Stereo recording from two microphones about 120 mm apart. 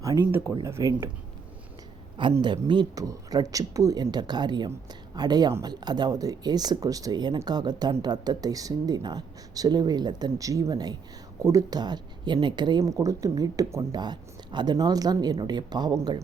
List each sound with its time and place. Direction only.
0.0 s speech: 25° right (ahead or behind)
2.4 s speech: 40° right (ahead or behind)
12.8 s speech: 30° right (ahead or behind)